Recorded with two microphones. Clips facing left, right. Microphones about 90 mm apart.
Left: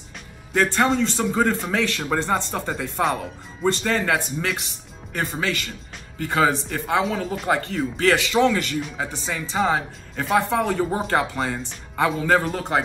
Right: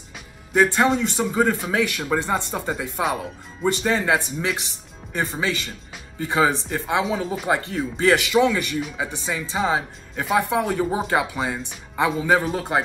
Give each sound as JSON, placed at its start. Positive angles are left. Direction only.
{"t": 0.6, "sound": "speech", "side_deg": -10}